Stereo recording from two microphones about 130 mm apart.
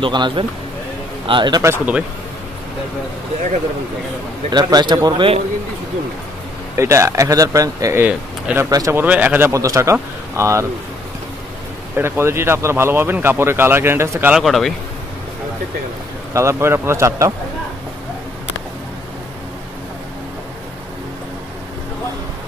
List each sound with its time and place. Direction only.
0.0 s speech: 40° right (ahead or behind)
1.6 s speech: 20° right (ahead or behind)
4.5 s speech: 30° right (ahead or behind)
6.8 s speech: 20° right (ahead or behind)
8.0 s speech: 10° right (ahead or behind)
8.6 s speech: 30° right (ahead or behind)
8.9 s speech: 10° right (ahead or behind)
9.5 s speech: 25° right (ahead or behind)
12.0 s speech: 20° right (ahead or behind)
14.3 s a man's voice: centre (ahead or behind)
16.3 s speech: 20° right (ahead or behind)